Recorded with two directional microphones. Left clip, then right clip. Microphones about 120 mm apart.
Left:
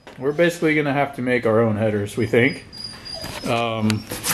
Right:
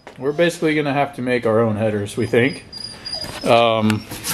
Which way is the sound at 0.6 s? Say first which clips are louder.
Right 1 dB; 10° right (ahead or behind).